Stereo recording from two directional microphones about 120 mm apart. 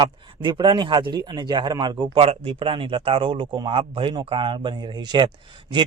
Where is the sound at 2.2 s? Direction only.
50° right (ahead or behind).